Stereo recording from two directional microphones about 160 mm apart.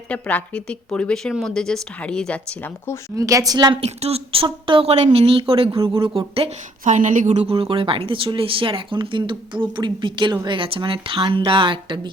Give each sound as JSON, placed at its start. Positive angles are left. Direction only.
{"t": 0.1, "sound": "speech", "side_deg": 10}
{"t": 3.2, "sound": "a woman's voice", "side_deg": -20}
{"t": 3.8, "sound": "speech", "side_deg": -40}
{"t": 6.8, "sound": "speech", "side_deg": -50}